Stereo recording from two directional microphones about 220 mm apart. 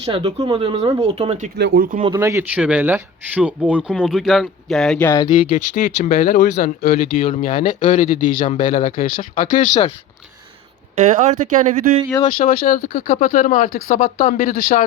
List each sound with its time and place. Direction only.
0.0 s speech: 25° right (ahead or behind)
1.5 s speech: 50° right (ahead or behind)
2.1 s speech: 15° right (ahead or behind); by 5.4 s 15° left (ahead or behind)
5.5 s speech: 35° left (ahead or behind)
7.2 s speech: 25° left (ahead or behind)
7.4 s speech: 40° left (ahead or behind)
10.9 s speech: 30° right (ahead or behind)
12.3 s speech: 40° left (ahead or behind)